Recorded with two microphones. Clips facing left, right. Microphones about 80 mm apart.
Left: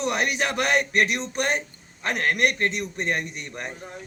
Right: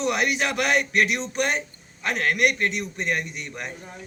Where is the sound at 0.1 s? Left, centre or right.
Left.